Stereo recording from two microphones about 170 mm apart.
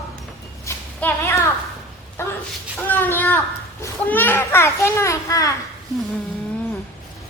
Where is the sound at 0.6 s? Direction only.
15° left (ahead or behind).